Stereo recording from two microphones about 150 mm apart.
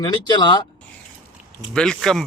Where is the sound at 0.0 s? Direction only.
30° left (ahead or behind).